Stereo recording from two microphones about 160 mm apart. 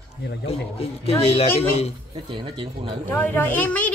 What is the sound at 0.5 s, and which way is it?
A woman's voice, 40° left (ahead or behind).